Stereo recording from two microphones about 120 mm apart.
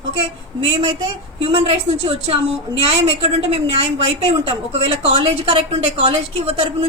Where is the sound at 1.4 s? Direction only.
45° right (ahead or behind).